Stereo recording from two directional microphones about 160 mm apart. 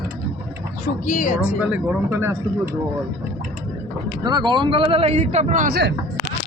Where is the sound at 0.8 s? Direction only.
50° left (ahead or behind).